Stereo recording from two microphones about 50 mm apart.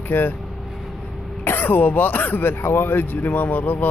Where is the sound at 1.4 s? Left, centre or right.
Left.